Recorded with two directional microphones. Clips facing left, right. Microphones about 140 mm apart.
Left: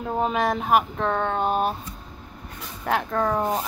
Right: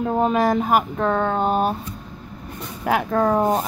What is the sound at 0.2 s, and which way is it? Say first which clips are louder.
Speech: right 4 dB; centre (ahead or behind).